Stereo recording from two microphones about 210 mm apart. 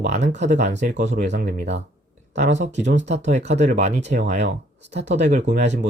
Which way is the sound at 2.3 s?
35° right (ahead or behind).